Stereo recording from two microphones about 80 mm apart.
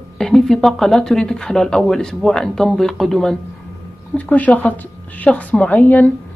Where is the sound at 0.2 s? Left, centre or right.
Centre.